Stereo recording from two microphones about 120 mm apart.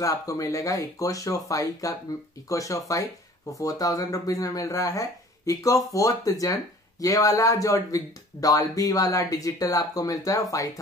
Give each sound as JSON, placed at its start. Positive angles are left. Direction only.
{"t": 0.0, "sound": "speech", "side_deg": 30}